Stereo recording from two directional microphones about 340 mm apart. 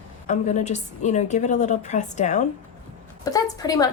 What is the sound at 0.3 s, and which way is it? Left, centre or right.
A woman's voice, left.